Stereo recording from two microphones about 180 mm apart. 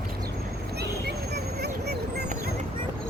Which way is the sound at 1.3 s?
65° right (ahead or behind).